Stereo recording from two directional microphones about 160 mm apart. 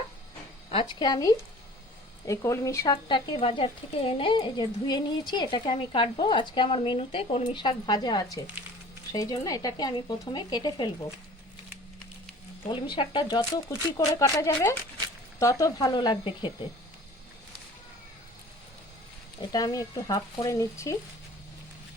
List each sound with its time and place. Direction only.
0.7 s speech: 30° left (ahead or behind)
12.6 s speech: 30° left (ahead or behind)
19.4 s speech: 25° left (ahead or behind)